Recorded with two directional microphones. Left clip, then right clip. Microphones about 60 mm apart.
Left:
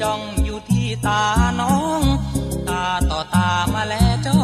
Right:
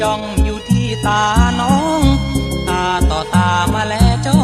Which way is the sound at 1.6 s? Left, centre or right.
Left.